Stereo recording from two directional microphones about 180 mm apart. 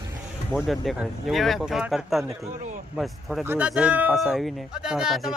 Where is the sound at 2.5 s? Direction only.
45° right (ahead or behind).